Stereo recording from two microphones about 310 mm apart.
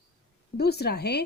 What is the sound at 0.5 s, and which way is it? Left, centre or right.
Speech, left.